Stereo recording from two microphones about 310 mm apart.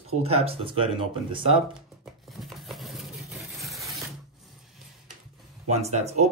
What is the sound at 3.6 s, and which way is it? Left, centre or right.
Printer, centre.